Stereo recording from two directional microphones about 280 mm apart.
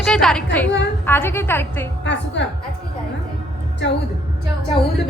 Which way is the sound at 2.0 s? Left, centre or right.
Left.